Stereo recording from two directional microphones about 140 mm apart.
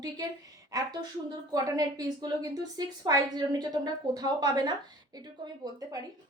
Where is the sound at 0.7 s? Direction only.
30° right (ahead or behind).